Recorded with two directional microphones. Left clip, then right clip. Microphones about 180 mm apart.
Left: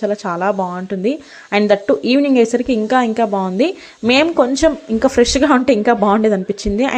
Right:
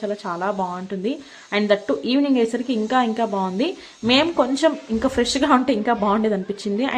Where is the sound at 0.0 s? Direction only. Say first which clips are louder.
Left 7 dB; 30° left (ahead or behind).